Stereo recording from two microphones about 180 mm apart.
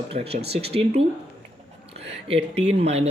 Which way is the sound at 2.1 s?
35° right (ahead or behind).